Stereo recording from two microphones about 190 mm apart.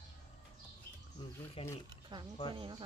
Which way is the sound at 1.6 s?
30° left (ahead or behind).